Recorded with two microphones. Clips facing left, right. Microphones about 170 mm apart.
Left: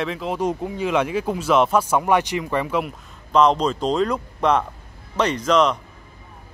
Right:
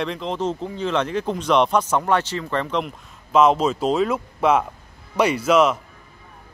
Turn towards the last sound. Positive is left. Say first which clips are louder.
# right 1 dB
turn(degrees=-5)  # may be behind; listen again after turning